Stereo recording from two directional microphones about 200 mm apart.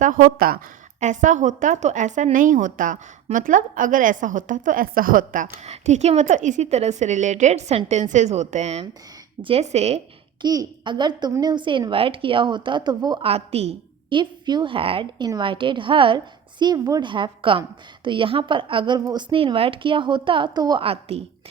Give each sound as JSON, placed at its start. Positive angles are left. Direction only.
{"t": 0.0, "sound": "a woman's voice", "side_deg": -45}
{"t": 10.4, "sound": "speech", "side_deg": -20}